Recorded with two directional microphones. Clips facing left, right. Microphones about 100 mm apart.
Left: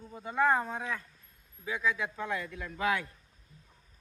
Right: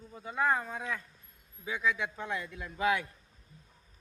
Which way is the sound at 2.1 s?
25° right (ahead or behind).